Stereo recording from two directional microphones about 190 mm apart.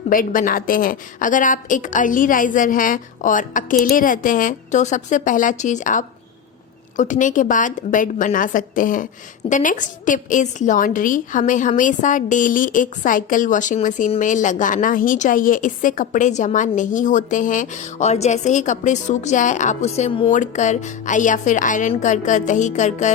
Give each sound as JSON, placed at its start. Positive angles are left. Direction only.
{"t": 0.1, "sound": "a woman's voice", "side_deg": 45}